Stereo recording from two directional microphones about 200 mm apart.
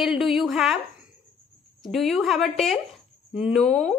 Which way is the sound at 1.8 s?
Centre (ahead or behind).